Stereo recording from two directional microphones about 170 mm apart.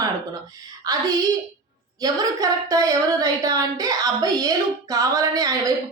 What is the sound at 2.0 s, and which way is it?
Speech, 20° right (ahead or behind).